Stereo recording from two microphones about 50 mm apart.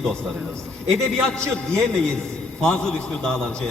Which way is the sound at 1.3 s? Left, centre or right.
Centre.